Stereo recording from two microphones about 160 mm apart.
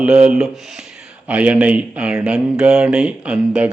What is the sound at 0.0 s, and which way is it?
Speech, 5° right (ahead or behind).